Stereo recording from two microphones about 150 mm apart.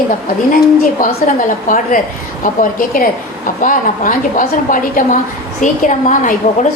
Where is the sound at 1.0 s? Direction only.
65° left (ahead or behind).